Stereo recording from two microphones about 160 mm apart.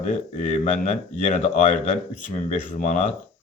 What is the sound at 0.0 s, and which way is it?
Speech, 50° left (ahead or behind).